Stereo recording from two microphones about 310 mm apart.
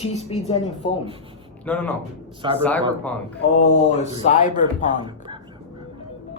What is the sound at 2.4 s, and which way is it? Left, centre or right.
Speech, centre.